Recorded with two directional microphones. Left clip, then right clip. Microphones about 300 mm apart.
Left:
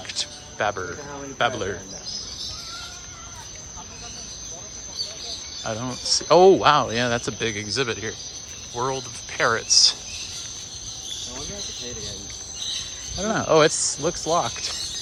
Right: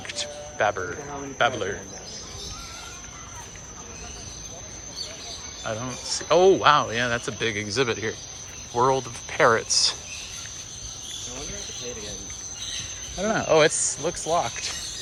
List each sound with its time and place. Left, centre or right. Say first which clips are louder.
0.1 s music: left 2 dB; centre
1.4 s speech: even; centre
5.6 s speech: left 4 dB; centre
13.1 s speech: left 1 dB; centre